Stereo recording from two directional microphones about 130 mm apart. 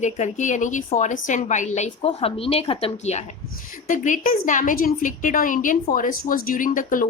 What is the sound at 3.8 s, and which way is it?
A woman's voice, 85° left.